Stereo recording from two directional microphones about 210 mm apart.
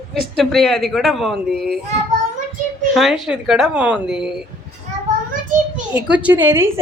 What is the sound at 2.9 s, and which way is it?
Speech, centre (ahead or behind).